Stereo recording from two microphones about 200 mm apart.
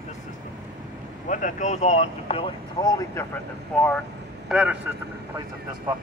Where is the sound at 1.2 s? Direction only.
40° left (ahead or behind); by 3.3 s 20° left (ahead or behind).